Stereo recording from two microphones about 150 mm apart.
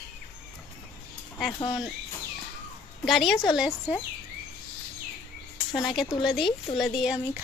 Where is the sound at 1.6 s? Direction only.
25° left (ahead or behind).